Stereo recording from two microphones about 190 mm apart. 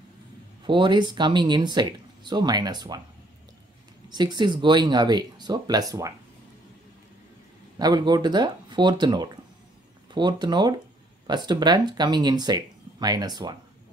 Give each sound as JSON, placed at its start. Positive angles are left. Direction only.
{"t": 0.7, "sound": "speech", "side_deg": -25}
{"t": 4.1, "sound": "speech", "side_deg": -20}
{"t": 7.8, "sound": "speech", "side_deg": -20}